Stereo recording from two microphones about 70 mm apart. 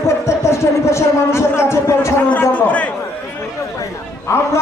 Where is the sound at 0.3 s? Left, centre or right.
Left.